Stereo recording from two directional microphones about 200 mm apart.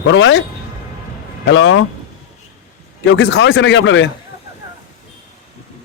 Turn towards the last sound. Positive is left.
turn(degrees=70)  # may be behind; listen again after turning